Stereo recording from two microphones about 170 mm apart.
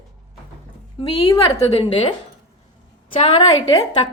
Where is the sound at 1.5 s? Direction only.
30° left (ahead or behind).